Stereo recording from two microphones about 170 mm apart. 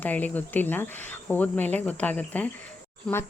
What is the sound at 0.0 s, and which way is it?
Speech, 10° left (ahead or behind).